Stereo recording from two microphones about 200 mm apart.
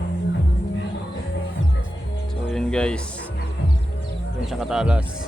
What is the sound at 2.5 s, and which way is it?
Music, 5° left (ahead or behind).